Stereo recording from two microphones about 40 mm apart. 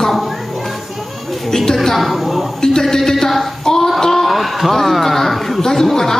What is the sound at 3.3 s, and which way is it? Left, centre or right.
Speech, centre.